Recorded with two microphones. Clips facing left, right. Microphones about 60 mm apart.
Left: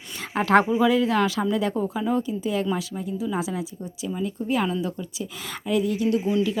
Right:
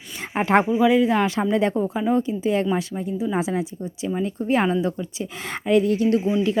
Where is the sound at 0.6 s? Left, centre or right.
Centre.